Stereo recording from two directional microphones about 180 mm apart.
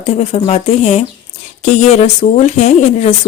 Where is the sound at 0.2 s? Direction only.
35° left (ahead or behind).